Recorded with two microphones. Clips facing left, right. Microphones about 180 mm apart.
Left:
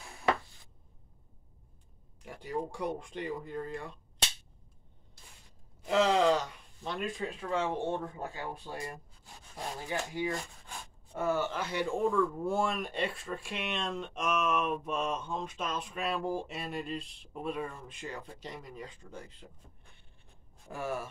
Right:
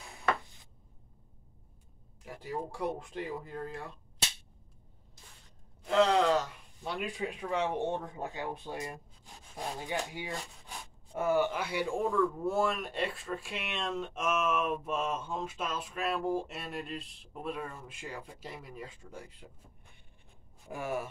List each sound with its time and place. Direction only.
2.2 s speech: centre (ahead or behind)
5.9 s speech: centre (ahead or behind)
20.7 s speech: 15° right (ahead or behind)